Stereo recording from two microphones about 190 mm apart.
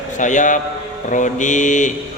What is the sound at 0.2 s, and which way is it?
Speech, 40° left (ahead or behind).